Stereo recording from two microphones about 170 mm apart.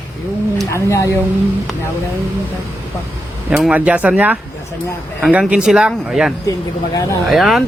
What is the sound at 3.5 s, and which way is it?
Speech, 5° right (ahead or behind).